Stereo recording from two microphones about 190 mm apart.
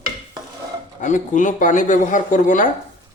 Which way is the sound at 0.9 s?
40° left (ahead or behind).